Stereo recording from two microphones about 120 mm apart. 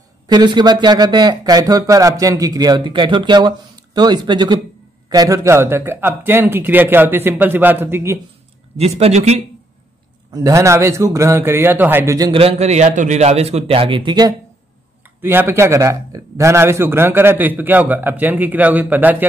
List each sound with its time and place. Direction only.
0.3 s speech: 40° right (ahead or behind)
5.1 s a man's voice: 30° right (ahead or behind)
8.7 s a man's voice: 60° right (ahead or behind)
10.3 s a man's voice: 25° right (ahead or behind)
12.3 s a man's voice: 55° right (ahead or behind); by 14.3 s 40° right (ahead or behind)
15.2 s a man's voice: 20° right (ahead or behind)